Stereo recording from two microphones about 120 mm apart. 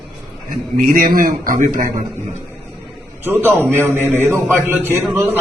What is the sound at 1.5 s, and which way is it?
Speech, 90° right.